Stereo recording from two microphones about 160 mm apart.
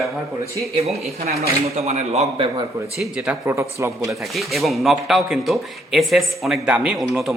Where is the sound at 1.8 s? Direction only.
40° right (ahead or behind).